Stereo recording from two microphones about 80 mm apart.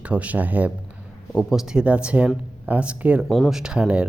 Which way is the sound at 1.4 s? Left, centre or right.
Centre.